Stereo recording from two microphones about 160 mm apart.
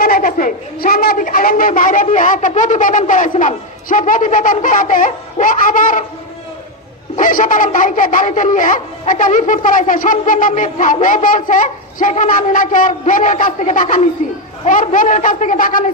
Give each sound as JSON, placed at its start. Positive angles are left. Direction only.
{"t": 0.0, "sound": "speech", "side_deg": 65}
{"t": 7.2, "sound": "a man's voice", "side_deg": 55}